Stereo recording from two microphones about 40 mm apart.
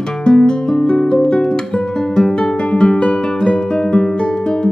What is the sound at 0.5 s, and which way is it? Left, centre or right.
Guitar, centre.